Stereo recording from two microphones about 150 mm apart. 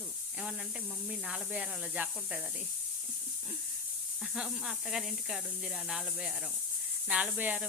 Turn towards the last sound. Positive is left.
turn(degrees=-10)  # may be behind; listen again after turning